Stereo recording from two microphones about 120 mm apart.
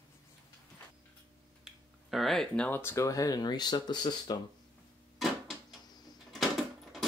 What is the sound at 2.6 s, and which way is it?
Speech, 20° left (ahead or behind).